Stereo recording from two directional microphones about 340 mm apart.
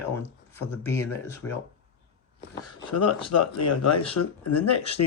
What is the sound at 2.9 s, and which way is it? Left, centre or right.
Speech, left.